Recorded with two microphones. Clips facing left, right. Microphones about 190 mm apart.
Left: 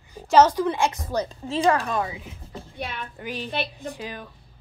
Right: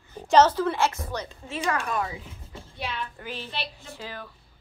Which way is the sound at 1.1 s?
35° left (ahead or behind).